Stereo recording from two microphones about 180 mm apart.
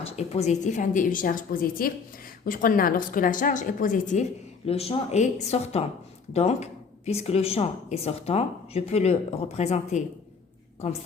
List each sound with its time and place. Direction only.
0.0 s a woman's voice: 35° left (ahead or behind)